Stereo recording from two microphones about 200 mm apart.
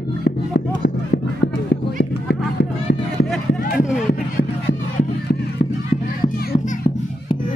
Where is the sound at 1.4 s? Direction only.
55° left (ahead or behind).